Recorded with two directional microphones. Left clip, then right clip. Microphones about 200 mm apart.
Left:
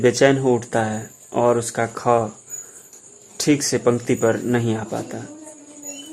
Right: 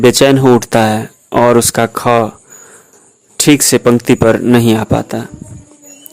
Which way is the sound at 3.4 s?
35° right (ahead or behind).